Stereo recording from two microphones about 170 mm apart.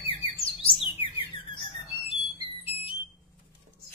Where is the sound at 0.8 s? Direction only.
30° left (ahead or behind).